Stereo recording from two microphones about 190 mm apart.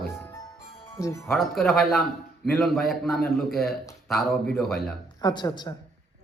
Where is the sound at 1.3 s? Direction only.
Centre (ahead or behind).